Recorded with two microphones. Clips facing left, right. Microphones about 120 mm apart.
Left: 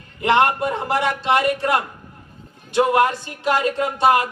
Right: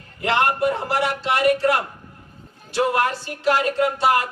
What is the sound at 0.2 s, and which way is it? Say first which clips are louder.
Speech: left 3 dB; 20° left (ahead or behind).